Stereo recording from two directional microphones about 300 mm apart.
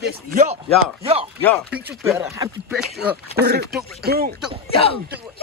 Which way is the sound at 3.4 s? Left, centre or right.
Right.